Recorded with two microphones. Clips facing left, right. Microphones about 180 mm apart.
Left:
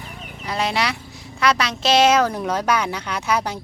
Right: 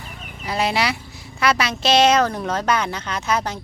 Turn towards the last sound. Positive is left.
turn(degrees=10)  # may be behind; listen again after turning